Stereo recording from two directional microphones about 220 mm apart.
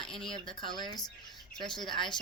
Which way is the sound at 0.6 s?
20° left (ahead or behind).